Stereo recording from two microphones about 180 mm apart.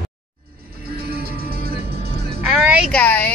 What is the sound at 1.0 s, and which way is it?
Music, 60° right (ahead or behind).